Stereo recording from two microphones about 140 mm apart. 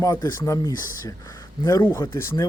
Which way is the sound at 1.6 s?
25° left (ahead or behind).